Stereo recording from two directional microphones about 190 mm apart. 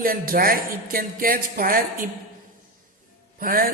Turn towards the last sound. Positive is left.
turn(degrees=-50)  # may be behind; listen again after turning